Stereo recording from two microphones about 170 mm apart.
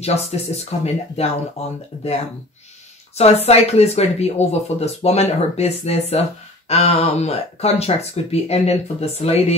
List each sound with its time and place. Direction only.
0.0 s speech: 40° left (ahead or behind)
3.2 s speech: 35° left (ahead or behind)